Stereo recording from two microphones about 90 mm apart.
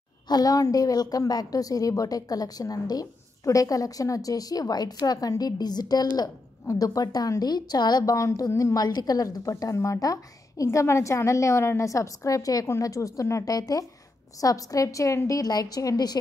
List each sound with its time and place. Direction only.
0.3 s a woman's voice: 45° left (ahead or behind)